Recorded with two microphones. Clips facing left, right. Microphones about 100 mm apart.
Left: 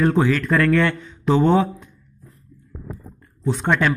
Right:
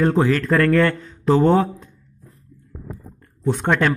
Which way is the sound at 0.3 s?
40° right (ahead or behind).